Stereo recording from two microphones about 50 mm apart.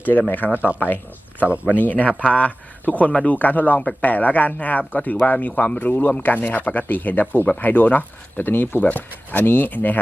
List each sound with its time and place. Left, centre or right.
0.0 s speech: left
0.5 s speech: right
1.8 s speech: left